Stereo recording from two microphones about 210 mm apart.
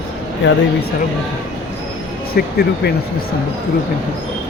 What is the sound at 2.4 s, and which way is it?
Speech, 50° left (ahead or behind).